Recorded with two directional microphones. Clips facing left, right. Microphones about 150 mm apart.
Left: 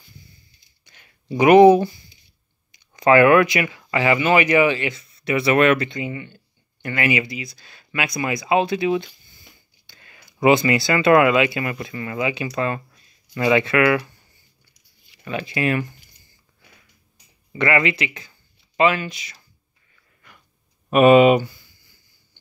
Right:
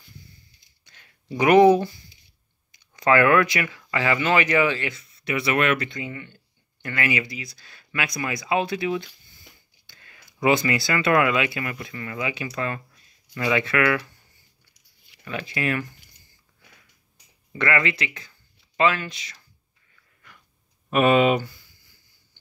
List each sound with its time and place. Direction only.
0.8 s a sound: 15° left (ahead or behind)
2.7 s speech: 15° left (ahead or behind)
5.2 s speech: 35° left (ahead or behind)
5.9 s speech: 15° left (ahead or behind)
15.2 s speech: 20° left (ahead or behind)
17.5 s speech: 15° left (ahead or behind)
20.9 s speech: 15° left (ahead or behind)